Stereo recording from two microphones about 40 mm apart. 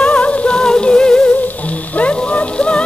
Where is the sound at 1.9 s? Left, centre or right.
Left.